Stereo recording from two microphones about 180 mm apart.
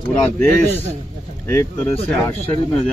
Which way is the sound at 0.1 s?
10° left (ahead or behind).